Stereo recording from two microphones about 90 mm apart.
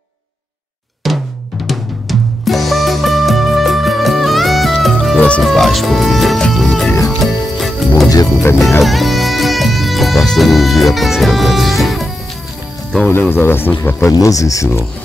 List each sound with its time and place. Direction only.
1.0 s drum: centre (ahead or behind)
1.7 s music: centre (ahead or behind)
13.0 s speech: 25° left (ahead or behind)
14.0 s speech: 40° left (ahead or behind)